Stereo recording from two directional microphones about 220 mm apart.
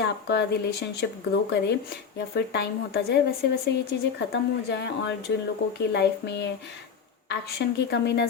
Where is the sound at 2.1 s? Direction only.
50° left (ahead or behind).